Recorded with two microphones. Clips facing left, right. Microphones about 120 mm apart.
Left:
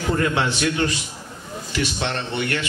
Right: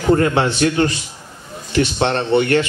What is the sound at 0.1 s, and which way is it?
Speech, 40° right (ahead or behind).